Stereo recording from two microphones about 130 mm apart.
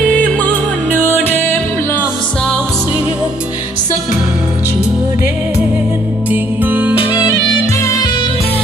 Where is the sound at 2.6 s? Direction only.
10° right (ahead or behind).